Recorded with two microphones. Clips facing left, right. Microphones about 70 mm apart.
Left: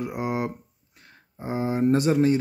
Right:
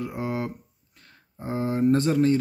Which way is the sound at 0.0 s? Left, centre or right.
Centre.